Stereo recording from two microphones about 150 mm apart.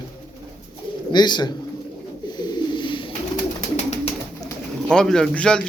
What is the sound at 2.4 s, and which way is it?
Bird, 30° left (ahead or behind).